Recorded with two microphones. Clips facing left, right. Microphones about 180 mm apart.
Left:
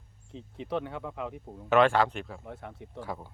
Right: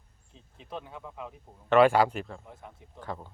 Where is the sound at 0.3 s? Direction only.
70° left (ahead or behind).